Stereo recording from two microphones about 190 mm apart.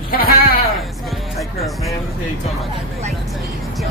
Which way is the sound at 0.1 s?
50° left (ahead or behind).